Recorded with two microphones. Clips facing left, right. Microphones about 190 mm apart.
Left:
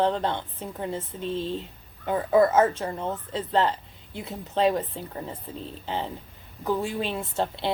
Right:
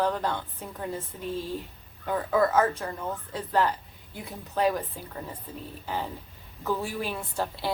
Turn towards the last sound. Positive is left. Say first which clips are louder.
# left 3 dB
turn(degrees=25)  # may be behind; listen again after turning